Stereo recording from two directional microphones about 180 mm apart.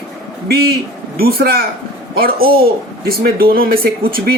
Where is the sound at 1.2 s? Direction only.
55° right (ahead or behind).